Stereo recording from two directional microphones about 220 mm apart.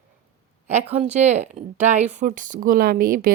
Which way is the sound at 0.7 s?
30° right (ahead or behind).